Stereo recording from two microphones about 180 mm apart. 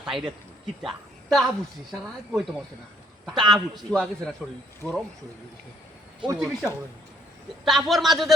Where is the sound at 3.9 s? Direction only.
5° left (ahead or behind).